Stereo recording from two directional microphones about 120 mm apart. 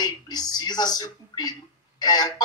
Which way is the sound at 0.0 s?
35° left (ahead or behind).